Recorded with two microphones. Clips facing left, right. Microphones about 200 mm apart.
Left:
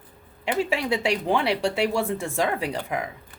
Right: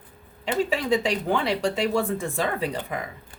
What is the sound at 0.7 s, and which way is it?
Speech, 10° left (ahead or behind).